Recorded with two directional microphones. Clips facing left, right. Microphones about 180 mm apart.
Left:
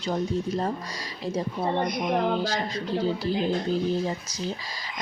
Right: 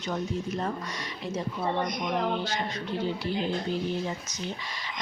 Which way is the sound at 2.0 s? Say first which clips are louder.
Left 4 dB; 35° left (ahead or behind).